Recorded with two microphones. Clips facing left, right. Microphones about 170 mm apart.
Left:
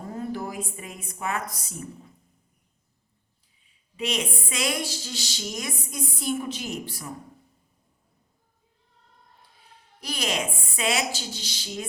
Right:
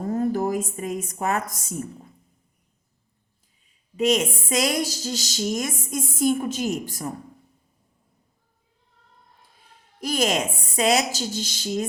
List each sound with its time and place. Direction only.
0.1 s a woman's voice: 45° right (ahead or behind)
3.9 s a woman's voice: 45° right (ahead or behind)
10.0 s a woman's voice: 45° right (ahead or behind)